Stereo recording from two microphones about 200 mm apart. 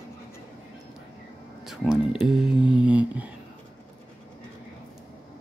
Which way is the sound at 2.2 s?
5° right (ahead or behind).